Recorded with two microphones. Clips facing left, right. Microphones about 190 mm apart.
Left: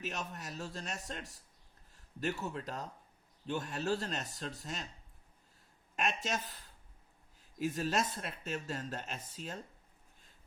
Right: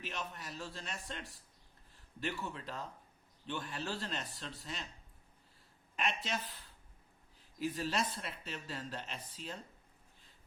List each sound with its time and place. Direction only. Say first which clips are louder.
0.0 s speech: left 2 dB; 45° left (ahead or behind)
2.2 s speech: left 3 dB; 45° left (ahead or behind)
6.0 s speech: left 2 dB; 45° left (ahead or behind)
7.6 s speech: left 2 dB; 45° left (ahead or behind)